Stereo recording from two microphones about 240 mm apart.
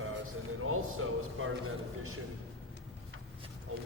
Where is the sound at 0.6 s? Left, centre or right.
Right.